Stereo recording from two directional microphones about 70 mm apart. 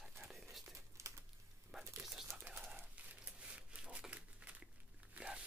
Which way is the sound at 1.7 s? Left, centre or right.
Centre.